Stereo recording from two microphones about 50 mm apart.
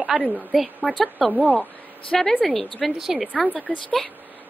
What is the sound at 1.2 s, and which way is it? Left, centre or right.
Speech, centre.